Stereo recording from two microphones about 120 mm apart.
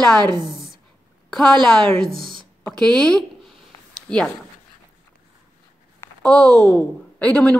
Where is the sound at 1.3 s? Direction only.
5° left (ahead or behind).